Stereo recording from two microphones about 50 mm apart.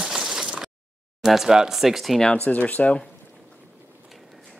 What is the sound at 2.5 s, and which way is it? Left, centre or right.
Speech, left.